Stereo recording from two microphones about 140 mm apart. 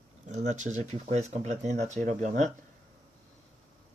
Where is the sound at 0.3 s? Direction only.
60° right (ahead or behind).